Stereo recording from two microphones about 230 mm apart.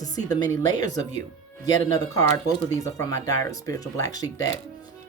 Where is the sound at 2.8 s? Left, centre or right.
Centre.